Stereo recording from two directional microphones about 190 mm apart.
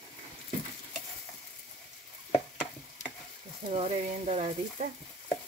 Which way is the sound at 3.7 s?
35° right (ahead or behind).